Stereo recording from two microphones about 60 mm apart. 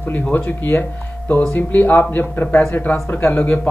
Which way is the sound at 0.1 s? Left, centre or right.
Left.